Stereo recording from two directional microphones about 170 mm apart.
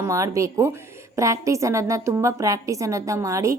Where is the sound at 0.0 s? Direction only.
20° right (ahead or behind).